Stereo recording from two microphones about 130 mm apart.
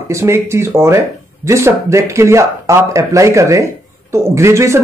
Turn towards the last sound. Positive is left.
turn(degrees=-20)  # may be behind; listen again after turning